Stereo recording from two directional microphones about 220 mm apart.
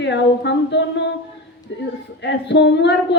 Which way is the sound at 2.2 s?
50° left (ahead or behind).